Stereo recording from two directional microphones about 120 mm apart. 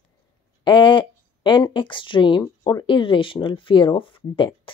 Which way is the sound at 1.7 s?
45° left (ahead or behind).